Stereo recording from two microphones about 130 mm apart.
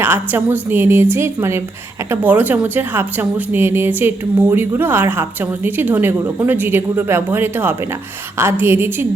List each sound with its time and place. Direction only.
0.0 s a woman's voice: 15° right (ahead or behind)